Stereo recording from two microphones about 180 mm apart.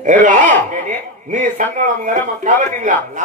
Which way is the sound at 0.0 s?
45° right (ahead or behind).